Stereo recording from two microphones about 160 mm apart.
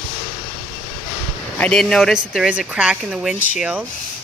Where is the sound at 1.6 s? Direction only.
5° left (ahead or behind).